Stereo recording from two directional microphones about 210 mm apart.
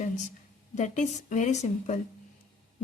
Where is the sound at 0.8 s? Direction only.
35° left (ahead or behind).